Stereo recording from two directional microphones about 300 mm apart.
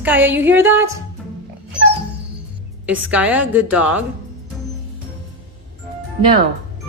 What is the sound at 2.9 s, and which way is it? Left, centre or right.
A woman's voice, centre.